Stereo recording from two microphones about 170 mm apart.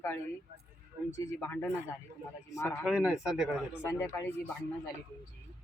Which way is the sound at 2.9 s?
5° right (ahead or behind).